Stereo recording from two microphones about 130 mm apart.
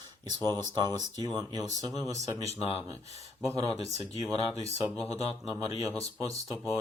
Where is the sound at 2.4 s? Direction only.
50° left (ahead or behind).